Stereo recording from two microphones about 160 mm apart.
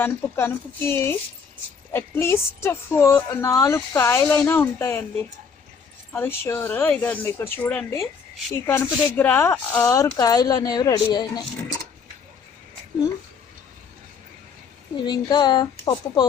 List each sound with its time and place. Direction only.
0.0 s a woman's voice: 15° left (ahead or behind)
15.0 s speech: 25° left (ahead or behind)